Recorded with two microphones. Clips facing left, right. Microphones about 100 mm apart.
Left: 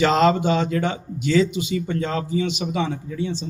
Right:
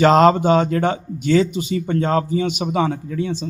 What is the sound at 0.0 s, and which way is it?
A man's voice, 45° right (ahead or behind).